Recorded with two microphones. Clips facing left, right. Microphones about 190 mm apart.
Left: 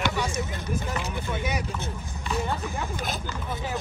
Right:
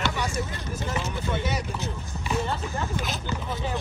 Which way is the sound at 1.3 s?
10° left (ahead or behind).